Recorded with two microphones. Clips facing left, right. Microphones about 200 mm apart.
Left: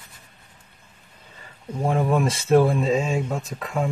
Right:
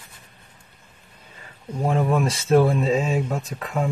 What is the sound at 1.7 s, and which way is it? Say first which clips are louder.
Speech: even; centre (ahead or behind).